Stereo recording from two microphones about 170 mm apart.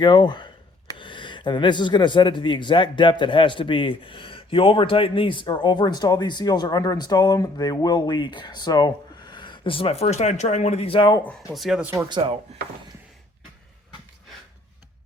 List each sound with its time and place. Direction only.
0.0 s speech: 25° left (ahead or behind)
11.4 s speech: centre (ahead or behind)
12.0 s speech: 30° right (ahead or behind)